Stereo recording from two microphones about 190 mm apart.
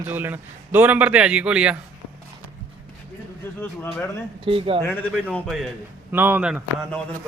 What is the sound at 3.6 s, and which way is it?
Speech, 10° left (ahead or behind).